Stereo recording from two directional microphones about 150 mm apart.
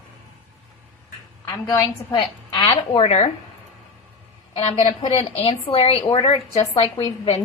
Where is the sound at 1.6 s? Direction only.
25° left (ahead or behind); by 3.2 s 45° left (ahead or behind).